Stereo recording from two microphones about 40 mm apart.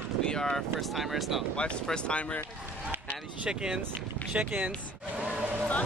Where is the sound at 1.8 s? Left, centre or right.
Left.